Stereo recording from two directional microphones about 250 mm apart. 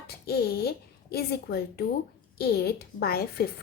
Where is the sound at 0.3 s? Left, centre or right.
Left.